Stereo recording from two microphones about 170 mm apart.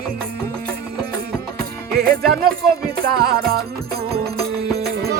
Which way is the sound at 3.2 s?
65° right (ahead or behind).